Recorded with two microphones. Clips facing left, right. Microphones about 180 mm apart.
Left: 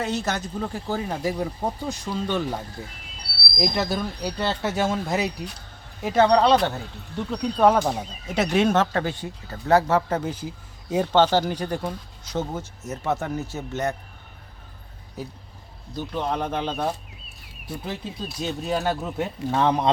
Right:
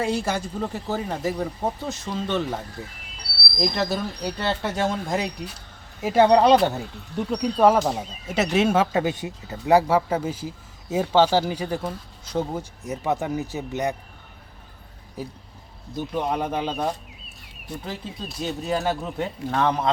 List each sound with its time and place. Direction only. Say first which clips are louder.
0.0 s speech: right 2 dB; 10° right (ahead or behind)
3.6 s speech: even; centre (ahead or behind)
6.0 s speech: right 2 dB; 5° right (ahead or behind)
6.3 s speech: right 2 dB; 15° right (ahead or behind)
7.3 s speech: right 1 dB; 5° right (ahead or behind)
16.0 s speech: right 1 dB; 10° right (ahead or behind)
17.7 s speech: left 1 dB; 5° left (ahead or behind)